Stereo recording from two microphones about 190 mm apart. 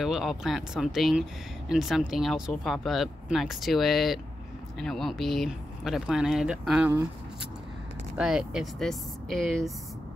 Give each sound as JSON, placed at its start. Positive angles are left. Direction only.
{"t": 0.0, "sound": "speech", "side_deg": 0}
{"t": 8.2, "sound": "speech", "side_deg": -5}